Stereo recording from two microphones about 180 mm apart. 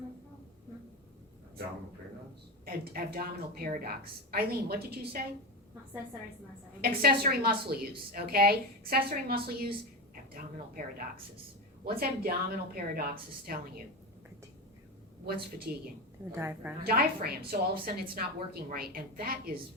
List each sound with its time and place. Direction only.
2.6 s a woman's voice: 55° right (ahead or behind)
6.8 s a woman's voice: 55° right (ahead or behind)
15.3 s a woman's voice: 55° right (ahead or behind)
16.3 s a woman's voice: 15° right (ahead or behind)
16.8 s a woman's voice: 60° right (ahead or behind)